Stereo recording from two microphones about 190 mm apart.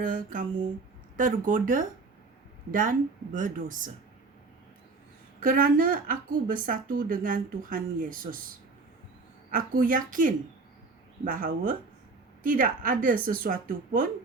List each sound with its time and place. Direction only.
0.0 s a woman's voice: 45° right (ahead or behind)
3.3 s a woman's voice: 45° right (ahead or behind)
5.4 s a woman's voice: 50° right (ahead or behind)
9.5 s a woman's voice: 45° right (ahead or behind)